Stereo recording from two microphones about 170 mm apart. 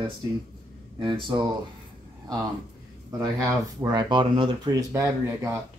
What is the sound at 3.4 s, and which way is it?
Speech, 15° right (ahead or behind).